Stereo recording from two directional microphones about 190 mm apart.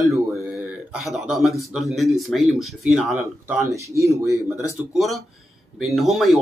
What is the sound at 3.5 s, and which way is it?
Speech, 15° right (ahead or behind).